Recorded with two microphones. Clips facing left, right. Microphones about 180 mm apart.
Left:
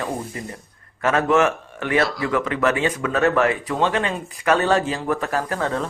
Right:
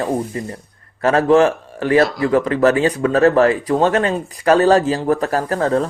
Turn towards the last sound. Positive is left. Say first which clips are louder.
# right 6 dB
turn(degrees=-40)  # may be behind; listen again after turning